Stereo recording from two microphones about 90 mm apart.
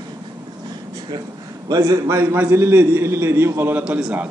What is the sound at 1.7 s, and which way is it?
A man's voice, 35° right (ahead or behind).